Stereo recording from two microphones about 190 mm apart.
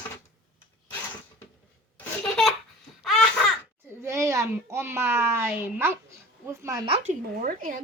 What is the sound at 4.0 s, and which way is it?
A child's voice, 15° right (ahead or behind).